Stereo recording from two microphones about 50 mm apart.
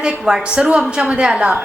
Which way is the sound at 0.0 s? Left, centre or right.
Centre.